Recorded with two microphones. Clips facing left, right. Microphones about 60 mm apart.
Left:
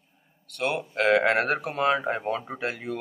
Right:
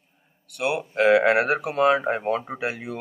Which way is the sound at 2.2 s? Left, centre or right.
Centre.